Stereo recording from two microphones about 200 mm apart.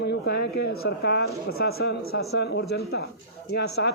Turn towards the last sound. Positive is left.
turn(degrees=55)  # may be behind; listen again after turning